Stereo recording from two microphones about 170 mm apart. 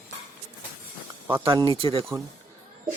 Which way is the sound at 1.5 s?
25° right (ahead or behind).